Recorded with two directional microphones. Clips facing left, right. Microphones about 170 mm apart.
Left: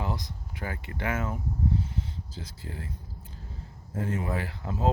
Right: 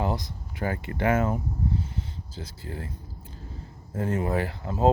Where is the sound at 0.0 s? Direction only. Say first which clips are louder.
Right 5 dB; 35° right (ahead or behind).